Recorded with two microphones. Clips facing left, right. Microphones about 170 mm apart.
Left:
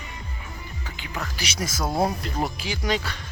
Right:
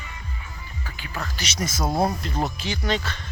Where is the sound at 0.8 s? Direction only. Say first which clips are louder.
Even; 20° left (ahead or behind).